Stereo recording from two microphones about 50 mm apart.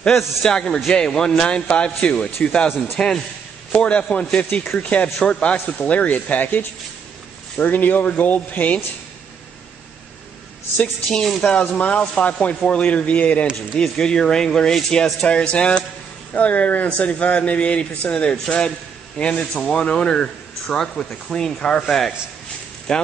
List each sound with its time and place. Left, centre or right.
0.4 s speech: centre; by 6.6 s left
7.6 s speech: left
10.8 s speech: centre
11.4 s speech: left
13.7 s a man's voice: centre